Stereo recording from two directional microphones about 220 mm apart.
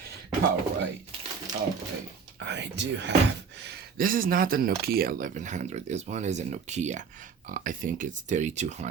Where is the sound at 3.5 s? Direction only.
50° right (ahead or behind); by 8.9 s 30° right (ahead or behind).